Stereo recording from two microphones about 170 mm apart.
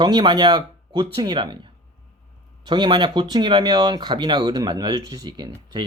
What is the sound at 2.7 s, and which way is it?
Speech, 25° right (ahead or behind).